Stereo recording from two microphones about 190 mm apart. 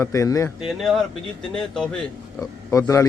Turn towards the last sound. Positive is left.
turn(degrees=15)  # may be behind; listen again after turning